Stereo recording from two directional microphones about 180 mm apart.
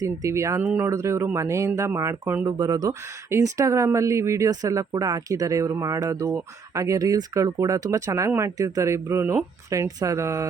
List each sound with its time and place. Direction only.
0.0 s speech: 15° right (ahead or behind)
0.6 s speech: 5° right (ahead or behind)